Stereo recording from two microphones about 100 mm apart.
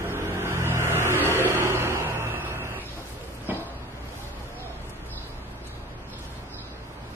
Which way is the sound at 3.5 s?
20° right (ahead or behind).